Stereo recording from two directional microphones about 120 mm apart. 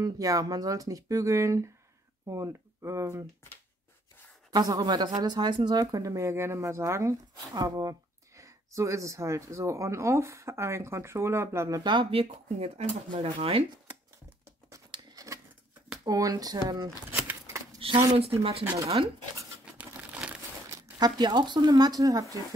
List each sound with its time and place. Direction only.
0.0 s speech: 30° right (ahead or behind)
4.5 s a woman's voice: 30° right (ahead or behind)
11.8 s speech: 40° right (ahead or behind); by 12.9 s 60° right (ahead or behind)
13.1 s speech: 45° right (ahead or behind)
14.9 s a sound: 30° right (ahead or behind)
16.0 s a woman's voice: 30° right (ahead or behind)
17.1 s a sound: 20° right (ahead or behind)
17.7 s speech: 50° right (ahead or behind)
19.6 s crumpling: 10° right (ahead or behind)
21.0 s a woman's voice: 35° right (ahead or behind)